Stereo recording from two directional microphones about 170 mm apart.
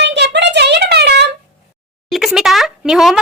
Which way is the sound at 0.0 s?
90° right.